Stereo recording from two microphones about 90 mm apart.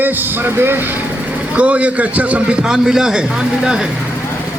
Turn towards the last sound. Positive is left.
turn(degrees=-10)  # may be behind; listen again after turning